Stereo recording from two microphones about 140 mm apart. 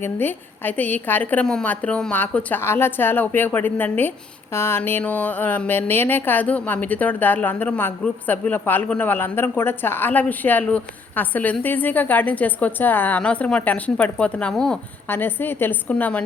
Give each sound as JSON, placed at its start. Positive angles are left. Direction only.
{"t": 0.0, "sound": "speech", "side_deg": 15}